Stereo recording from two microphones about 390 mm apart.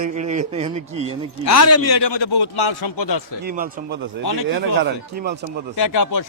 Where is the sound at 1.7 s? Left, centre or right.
Left.